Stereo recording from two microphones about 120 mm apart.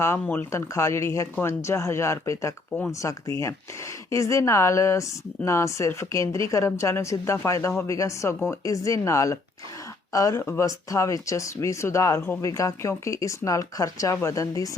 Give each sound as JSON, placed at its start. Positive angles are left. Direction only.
{"t": 0.0, "sound": "speech", "side_deg": 20}